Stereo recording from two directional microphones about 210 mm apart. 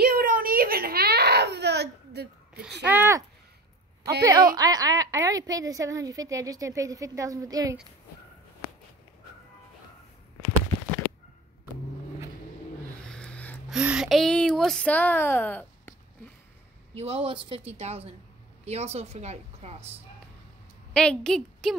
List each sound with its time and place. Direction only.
0.0 s whimper: 45° right (ahead or behind)
2.8 s a woman's voice: 10° right (ahead or behind)
13.1 s a sound: 5° left (ahead or behind)
13.7 s speech: 5° right (ahead or behind)
16.9 s a woman's voice: 30° right (ahead or behind)
20.9 s speech: 5° left (ahead or behind)